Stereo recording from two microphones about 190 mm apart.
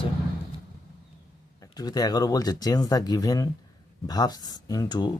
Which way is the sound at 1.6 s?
20° left (ahead or behind).